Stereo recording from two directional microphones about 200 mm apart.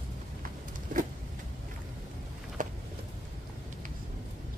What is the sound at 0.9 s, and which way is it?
Vehicle, 40° right (ahead or behind).